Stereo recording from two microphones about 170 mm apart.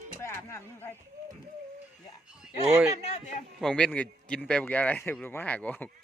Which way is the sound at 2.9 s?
40° left (ahead or behind).